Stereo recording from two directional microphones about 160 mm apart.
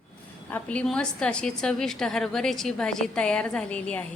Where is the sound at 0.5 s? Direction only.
5° left (ahead or behind).